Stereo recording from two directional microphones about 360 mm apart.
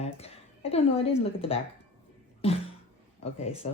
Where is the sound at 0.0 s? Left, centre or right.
Centre.